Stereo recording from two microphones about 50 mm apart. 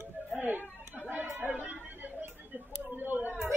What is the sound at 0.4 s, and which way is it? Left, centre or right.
Chatter, right.